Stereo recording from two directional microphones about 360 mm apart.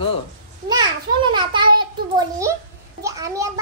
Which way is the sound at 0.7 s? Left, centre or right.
Centre.